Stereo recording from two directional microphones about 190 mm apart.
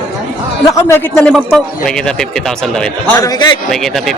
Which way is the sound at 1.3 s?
Centre (ahead or behind).